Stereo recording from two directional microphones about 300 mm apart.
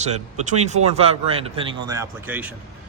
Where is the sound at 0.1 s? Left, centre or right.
Right; by 2.6 s centre.